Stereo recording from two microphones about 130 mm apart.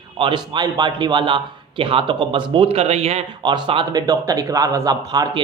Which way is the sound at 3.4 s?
40° right (ahead or behind).